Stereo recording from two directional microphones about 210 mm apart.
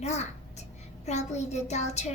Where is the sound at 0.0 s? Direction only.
30° left (ahead or behind).